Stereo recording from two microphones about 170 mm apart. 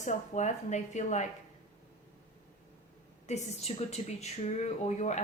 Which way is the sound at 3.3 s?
40° left (ahead or behind).